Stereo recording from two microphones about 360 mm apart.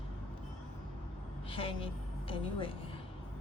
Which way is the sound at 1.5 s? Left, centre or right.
Centre.